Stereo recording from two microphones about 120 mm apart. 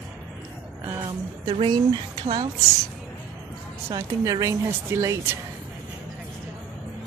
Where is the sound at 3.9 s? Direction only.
30° right (ahead or behind).